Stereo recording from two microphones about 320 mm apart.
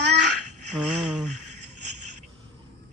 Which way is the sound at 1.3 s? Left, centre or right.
Right.